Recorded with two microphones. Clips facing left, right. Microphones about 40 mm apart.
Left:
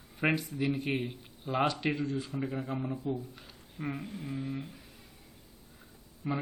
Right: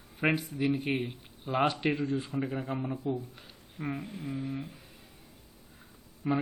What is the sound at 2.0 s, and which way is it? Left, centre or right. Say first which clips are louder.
Speech: right 2 dB; right.